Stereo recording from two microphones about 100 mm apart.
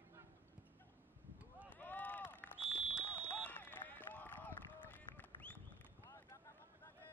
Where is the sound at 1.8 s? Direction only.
15° left (ahead or behind).